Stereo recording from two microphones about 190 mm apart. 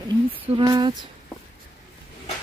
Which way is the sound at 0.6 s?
25° right (ahead or behind).